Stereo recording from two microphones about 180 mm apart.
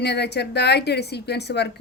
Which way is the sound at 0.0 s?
70° left (ahead or behind).